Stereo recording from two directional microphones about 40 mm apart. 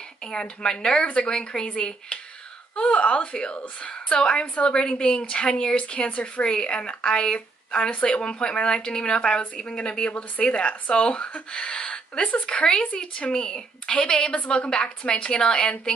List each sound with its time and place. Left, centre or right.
0.3 s speech: left
2.7 s a woman's voice: left
6.4 s speech: left
13.3 s a woman's voice: centre
14.7 s speech: left